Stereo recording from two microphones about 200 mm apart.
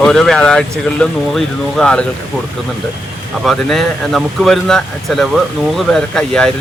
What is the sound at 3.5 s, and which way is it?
Speech, centre (ahead or behind).